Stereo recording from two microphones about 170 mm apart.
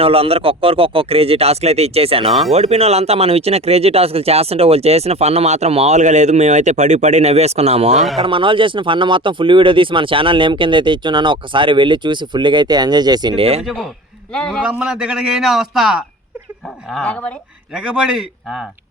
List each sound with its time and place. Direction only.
0.0 s speech: 35° right (ahead or behind)
8.2 s speech: 30° right (ahead or behind)
13.6 s a man's voice: centre (ahead or behind)
14.7 s a man's voice: 5° right (ahead or behind)
17.7 s a man's voice: 5° right (ahead or behind)